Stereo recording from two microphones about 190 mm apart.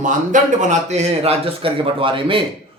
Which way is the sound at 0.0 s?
40° right (ahead or behind).